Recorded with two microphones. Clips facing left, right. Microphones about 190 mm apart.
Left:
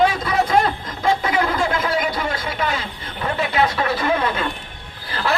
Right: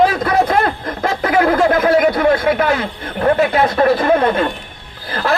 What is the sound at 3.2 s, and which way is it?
Speech, 45° right (ahead or behind).